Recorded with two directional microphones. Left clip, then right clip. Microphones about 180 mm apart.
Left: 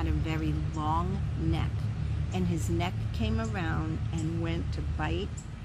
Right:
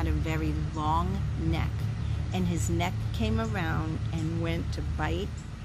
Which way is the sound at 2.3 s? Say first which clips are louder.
Right 1 dB; 10° right (ahead or behind).